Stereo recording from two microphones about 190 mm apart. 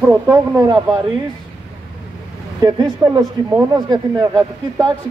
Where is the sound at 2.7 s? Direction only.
20° right (ahead or behind).